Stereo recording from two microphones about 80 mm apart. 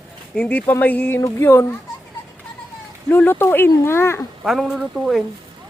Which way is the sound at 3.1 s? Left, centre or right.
Left.